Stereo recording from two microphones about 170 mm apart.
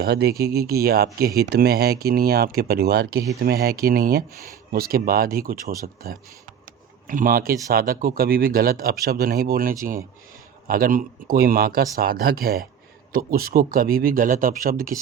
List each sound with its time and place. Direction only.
0.0 s speech: 70° right (ahead or behind)